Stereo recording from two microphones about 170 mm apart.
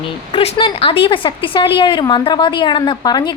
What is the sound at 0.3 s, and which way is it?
A woman's voice, 35° left (ahead or behind).